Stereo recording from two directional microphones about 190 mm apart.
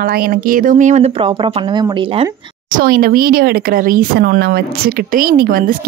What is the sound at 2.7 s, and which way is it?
Speech, 50° right (ahead or behind).